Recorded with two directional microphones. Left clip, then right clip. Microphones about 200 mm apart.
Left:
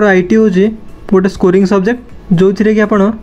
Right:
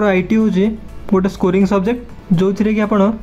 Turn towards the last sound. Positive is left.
turn(degrees=10)  # may be behind; listen again after turning